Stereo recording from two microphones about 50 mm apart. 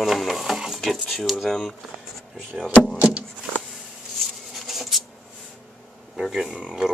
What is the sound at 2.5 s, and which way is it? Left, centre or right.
Speech, centre.